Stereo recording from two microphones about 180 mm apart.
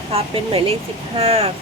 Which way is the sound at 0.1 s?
35° right (ahead or behind).